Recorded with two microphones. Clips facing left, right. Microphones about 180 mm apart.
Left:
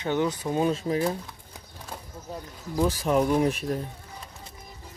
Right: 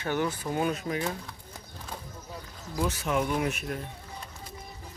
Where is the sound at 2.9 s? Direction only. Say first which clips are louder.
Left 6 dB; 35° left (ahead or behind).